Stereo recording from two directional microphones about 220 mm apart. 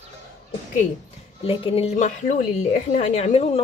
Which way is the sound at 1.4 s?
25° left (ahead or behind).